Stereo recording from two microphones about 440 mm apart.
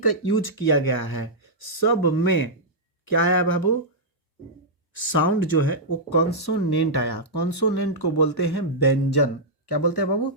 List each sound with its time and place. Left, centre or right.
0.0 s speech: left
5.1 s speech: left